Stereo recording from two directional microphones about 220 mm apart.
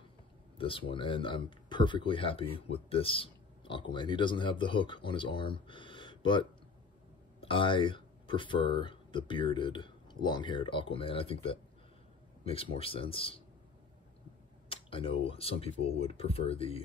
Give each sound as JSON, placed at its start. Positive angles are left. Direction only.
{"t": 0.6, "sound": "speech", "side_deg": 25}
{"t": 14.7, "sound": "speech", "side_deg": 25}